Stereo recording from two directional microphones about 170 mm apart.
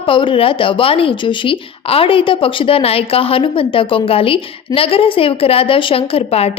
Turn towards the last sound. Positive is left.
turn(degrees=35)  # may be behind; listen again after turning